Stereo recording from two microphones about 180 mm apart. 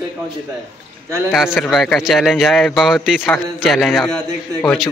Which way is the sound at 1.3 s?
5° right (ahead or behind).